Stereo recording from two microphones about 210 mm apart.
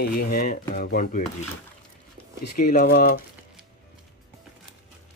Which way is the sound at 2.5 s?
40° left (ahead or behind).